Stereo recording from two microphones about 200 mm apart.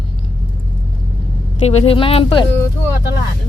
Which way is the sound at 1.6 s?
30° left (ahead or behind).